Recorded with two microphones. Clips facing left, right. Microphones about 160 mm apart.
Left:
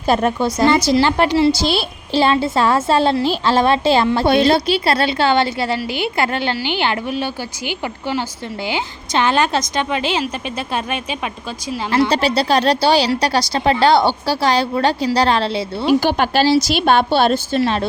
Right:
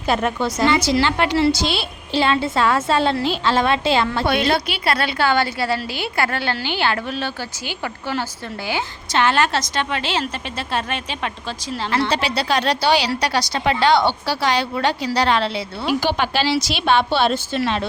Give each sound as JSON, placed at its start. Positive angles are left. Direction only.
{"t": 0.1, "sound": "a woman's voice", "side_deg": 35}
{"t": 8.6, "sound": "a woman's voice", "side_deg": 15}
{"t": 12.1, "sound": "a woman's voice", "side_deg": 35}
{"t": 15.9, "sound": "speech", "side_deg": 45}